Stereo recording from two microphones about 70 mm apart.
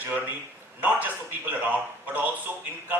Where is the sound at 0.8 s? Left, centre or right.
Right.